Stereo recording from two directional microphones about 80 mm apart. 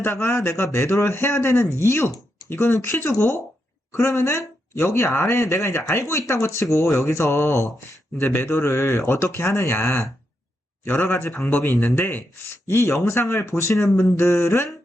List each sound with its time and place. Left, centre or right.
0.0 s a man's voice: left
10.8 s a man's voice: left